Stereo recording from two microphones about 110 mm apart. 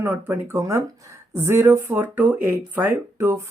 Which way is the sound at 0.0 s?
25° right (ahead or behind).